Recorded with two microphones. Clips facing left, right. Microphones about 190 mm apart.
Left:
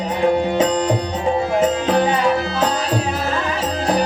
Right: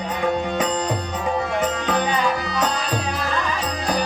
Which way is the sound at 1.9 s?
25° left (ahead or behind).